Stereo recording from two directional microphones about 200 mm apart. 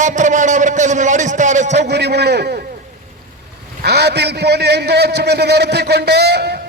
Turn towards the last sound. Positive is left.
turn(degrees=-55)  # may be behind; listen again after turning